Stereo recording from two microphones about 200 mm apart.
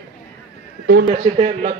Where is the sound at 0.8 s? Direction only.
55° right (ahead or behind).